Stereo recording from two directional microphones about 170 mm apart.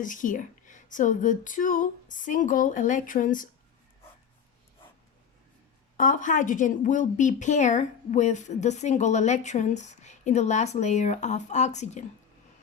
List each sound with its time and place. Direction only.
0.0 s a woman's voice: 50° left (ahead or behind)
6.0 s a woman's voice: 50° left (ahead or behind)